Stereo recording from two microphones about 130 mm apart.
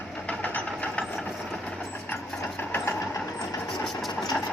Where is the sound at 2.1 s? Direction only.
5° left (ahead or behind).